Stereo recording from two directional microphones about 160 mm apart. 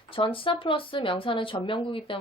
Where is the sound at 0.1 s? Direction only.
35° left (ahead or behind).